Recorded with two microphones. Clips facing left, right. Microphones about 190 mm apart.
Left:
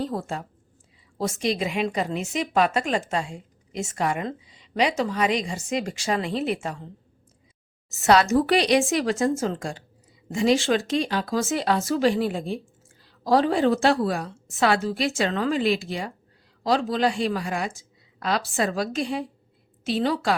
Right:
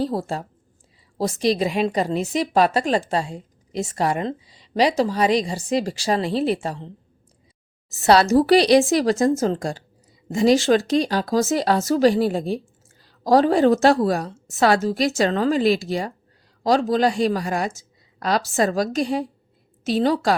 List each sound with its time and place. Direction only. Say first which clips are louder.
0.0 s a woman's voice: right 5 dB; 35° right (ahead or behind)